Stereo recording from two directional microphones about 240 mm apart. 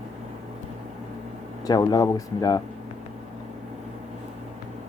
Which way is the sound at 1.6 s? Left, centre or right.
Centre.